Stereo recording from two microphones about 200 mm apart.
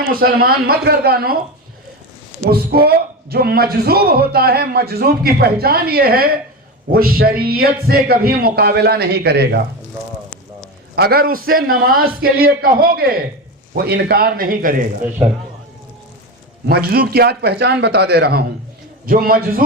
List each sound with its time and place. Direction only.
0.1 s speech: 50° right (ahead or behind)
2.5 s speech: 50° right (ahead or behind)
10.9 s speech: 50° right (ahead or behind)
16.6 s speech: 50° right (ahead or behind)